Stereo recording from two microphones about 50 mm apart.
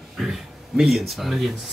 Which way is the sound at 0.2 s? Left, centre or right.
Centre.